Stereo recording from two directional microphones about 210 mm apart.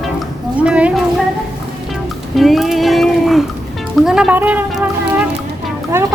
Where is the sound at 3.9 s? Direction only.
Centre (ahead or behind).